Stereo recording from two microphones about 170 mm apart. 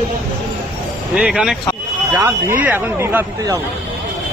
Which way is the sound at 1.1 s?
5° right (ahead or behind).